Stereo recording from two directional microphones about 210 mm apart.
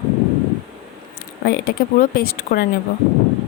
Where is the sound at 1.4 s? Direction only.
50° left (ahead or behind).